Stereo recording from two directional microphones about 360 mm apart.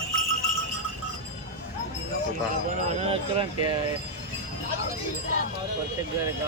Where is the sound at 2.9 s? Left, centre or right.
Centre.